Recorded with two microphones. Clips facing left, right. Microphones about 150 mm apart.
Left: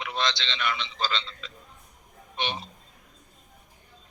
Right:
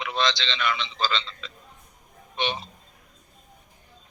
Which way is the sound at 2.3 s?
90° right.